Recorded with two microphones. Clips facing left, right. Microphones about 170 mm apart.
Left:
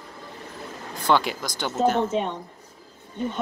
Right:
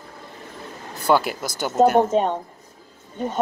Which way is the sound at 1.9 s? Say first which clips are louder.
Right 6 dB; 45° right (ahead or behind).